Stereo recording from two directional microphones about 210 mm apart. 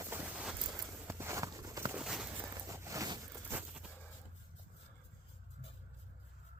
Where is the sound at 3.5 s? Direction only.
5° right (ahead or behind).